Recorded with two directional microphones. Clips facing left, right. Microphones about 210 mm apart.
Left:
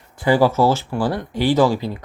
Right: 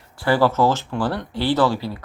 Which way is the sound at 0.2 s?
15° left (ahead or behind).